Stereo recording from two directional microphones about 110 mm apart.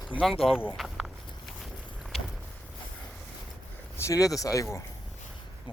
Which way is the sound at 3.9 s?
30° left (ahead or behind).